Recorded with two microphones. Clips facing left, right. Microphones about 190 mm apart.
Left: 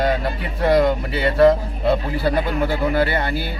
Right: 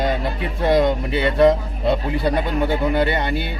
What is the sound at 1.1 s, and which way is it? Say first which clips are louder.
Speech: left 1 dB; centre (ahead or behind).